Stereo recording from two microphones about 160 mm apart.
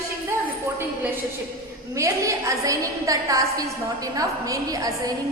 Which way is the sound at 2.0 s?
20° right (ahead or behind).